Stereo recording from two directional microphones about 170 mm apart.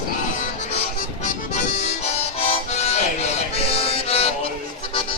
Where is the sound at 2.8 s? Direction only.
40° left (ahead or behind).